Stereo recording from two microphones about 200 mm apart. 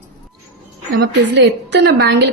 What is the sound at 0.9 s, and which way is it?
A woman's voice, 60° right (ahead or behind).